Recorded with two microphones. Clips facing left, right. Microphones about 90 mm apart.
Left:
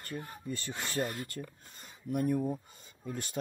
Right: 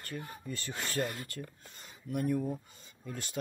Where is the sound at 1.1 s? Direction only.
40° left (ahead or behind).